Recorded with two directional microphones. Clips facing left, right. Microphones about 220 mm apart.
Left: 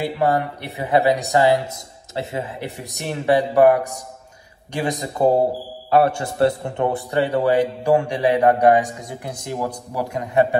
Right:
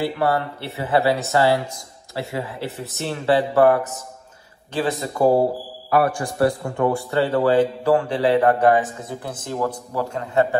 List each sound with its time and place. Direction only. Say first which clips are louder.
0.0 s a man's voice: left 1 dB; 15° left (ahead or behind)